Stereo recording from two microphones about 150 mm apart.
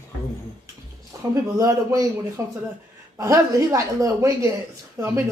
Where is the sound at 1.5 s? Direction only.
20° right (ahead or behind).